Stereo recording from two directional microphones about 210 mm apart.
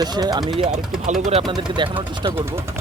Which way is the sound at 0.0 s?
20° right (ahead or behind).